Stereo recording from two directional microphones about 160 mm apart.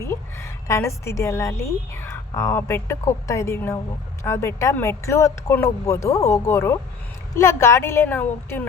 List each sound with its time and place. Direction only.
0.0 s a woman's voice: 15° left (ahead or behind)